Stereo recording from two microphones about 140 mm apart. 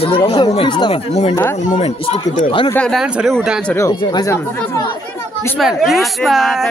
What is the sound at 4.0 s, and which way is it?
Speech, 30° left (ahead or behind).